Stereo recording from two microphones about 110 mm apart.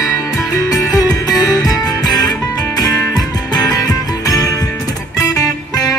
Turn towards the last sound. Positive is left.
turn(degrees=35)  # may be behind; listen again after turning